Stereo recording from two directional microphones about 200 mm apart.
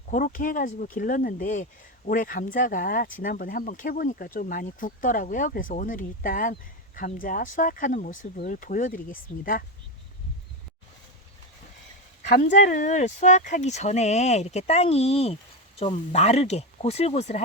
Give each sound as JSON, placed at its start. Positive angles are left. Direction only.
{"t": 0.1, "sound": "speech", "side_deg": 40}
{"t": 12.6, "sound": "speech", "side_deg": 40}